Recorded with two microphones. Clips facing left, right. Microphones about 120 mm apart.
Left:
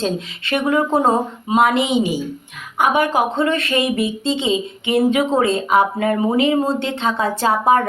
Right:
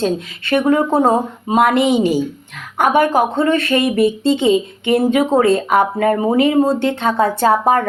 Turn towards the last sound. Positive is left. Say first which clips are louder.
# right 3 dB
turn(degrees=-45)  # may be behind; listen again after turning